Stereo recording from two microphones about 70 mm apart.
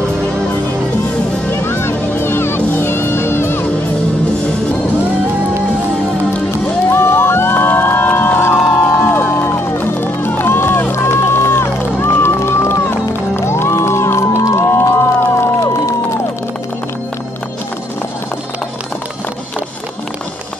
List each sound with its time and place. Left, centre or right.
1.5 s music: left
6.9 s music: left